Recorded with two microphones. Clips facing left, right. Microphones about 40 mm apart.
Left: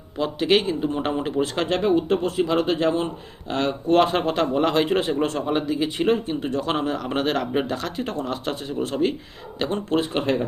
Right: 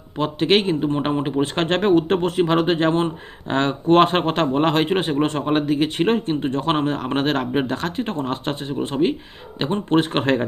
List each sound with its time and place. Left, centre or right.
0.2 s speech: right
0.8 s speech: right
1.5 s speech: right
10.0 s speech: right